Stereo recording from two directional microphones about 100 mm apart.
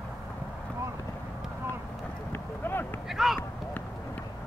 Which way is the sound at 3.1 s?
5° right (ahead or behind).